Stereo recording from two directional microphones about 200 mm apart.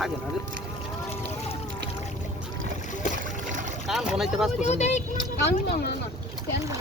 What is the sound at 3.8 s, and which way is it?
Speech, centre (ahead or behind).